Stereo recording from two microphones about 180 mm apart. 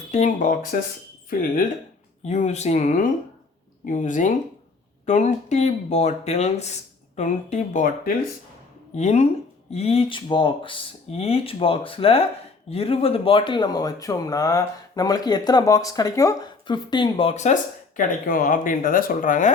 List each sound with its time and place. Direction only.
0.1 s speech: 40° left (ahead or behind)
2.2 s speech: 40° left (ahead or behind)